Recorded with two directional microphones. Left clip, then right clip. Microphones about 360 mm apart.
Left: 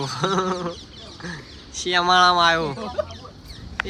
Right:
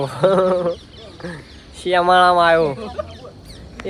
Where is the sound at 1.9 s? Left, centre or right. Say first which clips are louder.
Right 4 dB; centre.